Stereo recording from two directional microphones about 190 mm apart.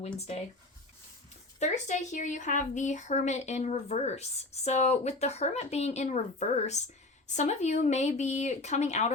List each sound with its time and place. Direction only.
1.5 s a woman's voice: 40° left (ahead or behind)